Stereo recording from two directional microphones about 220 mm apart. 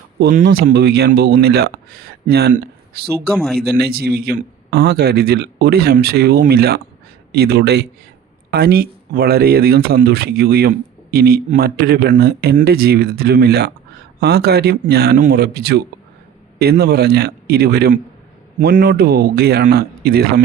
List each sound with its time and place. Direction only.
0.2 s speech: 45° right (ahead or behind)